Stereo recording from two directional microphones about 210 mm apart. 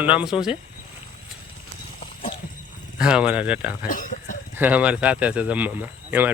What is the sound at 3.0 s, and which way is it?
Speech, 5° right (ahead or behind).